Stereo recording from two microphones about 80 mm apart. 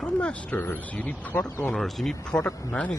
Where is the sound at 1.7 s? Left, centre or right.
Centre.